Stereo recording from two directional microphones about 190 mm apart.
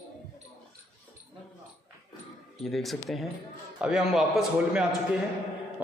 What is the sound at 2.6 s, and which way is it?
Speech, centre (ahead or behind).